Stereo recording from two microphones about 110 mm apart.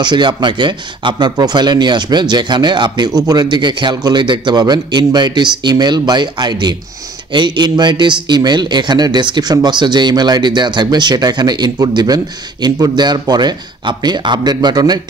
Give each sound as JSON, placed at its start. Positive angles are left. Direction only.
{"t": 0.0, "sound": "speech", "side_deg": -45}